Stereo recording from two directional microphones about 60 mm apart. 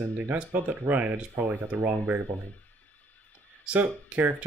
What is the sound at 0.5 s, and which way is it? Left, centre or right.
Speech, right.